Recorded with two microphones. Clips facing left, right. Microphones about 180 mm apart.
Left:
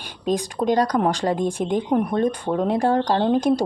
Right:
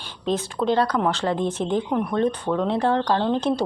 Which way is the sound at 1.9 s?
40° left (ahead or behind).